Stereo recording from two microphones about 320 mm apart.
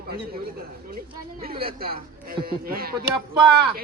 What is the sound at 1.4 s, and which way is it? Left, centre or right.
A man's voice, right.